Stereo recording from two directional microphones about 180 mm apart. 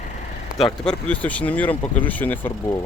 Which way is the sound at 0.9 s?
5° left (ahead or behind).